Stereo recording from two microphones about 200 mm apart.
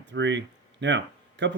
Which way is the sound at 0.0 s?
60° right (ahead or behind).